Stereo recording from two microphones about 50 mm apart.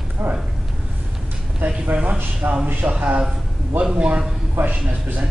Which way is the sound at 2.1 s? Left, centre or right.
Right.